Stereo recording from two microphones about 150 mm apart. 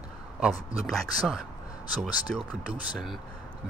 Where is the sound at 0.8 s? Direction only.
Centre (ahead or behind).